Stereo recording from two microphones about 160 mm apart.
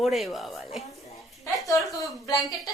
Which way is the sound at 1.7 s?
20° left (ahead or behind).